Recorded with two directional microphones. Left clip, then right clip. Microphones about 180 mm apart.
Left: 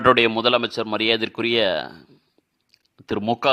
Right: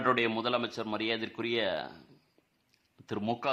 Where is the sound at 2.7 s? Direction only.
35° left (ahead or behind).